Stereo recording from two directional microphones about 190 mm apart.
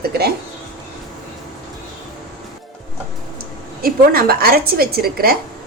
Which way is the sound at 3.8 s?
50° right (ahead or behind).